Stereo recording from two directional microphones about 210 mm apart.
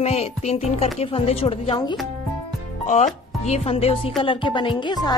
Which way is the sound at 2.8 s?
35° left (ahead or behind).